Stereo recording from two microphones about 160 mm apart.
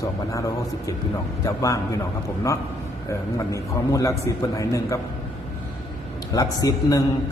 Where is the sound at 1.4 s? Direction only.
20° left (ahead or behind).